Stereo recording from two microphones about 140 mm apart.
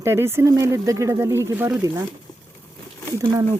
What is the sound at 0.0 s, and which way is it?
Speech, 15° right (ahead or behind).